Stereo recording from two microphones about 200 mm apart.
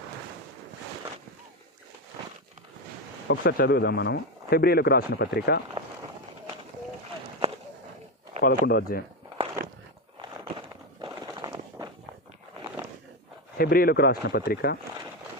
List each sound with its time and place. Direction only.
3.2 s speech: 55° left (ahead or behind)
8.4 s speech: 50° left (ahead or behind)
9.6 s biting: 50° right (ahead or behind)
10.2 s a sound: 25° right (ahead or behind)
13.6 s speech: 50° left (ahead or behind)